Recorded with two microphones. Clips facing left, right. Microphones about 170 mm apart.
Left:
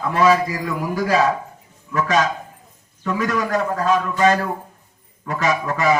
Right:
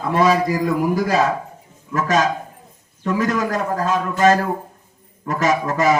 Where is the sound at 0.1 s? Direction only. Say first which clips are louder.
Right 1 dB; 40° right (ahead or behind).